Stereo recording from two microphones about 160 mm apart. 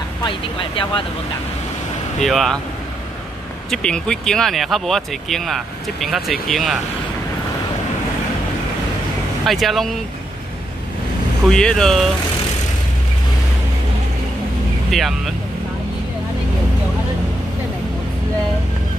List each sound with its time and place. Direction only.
0.2 s speech: 30° left (ahead or behind)
2.1 s speech: centre (ahead or behind)
3.7 s speech: 5° left (ahead or behind)
9.5 s speech: centre (ahead or behind)
11.4 s speech: 5° left (ahead or behind)
14.9 s speech: centre (ahead or behind)